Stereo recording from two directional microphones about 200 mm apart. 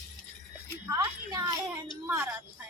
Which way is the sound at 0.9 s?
15° right (ahead or behind).